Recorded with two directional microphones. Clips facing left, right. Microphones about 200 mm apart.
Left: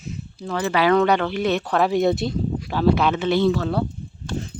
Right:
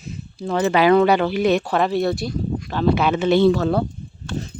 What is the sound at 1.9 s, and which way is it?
Speech, 20° left (ahead or behind).